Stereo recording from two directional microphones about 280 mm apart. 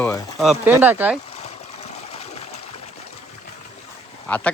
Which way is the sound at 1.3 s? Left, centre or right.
Left.